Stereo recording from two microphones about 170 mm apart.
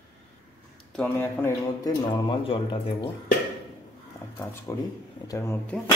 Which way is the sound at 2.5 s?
30° left (ahead or behind).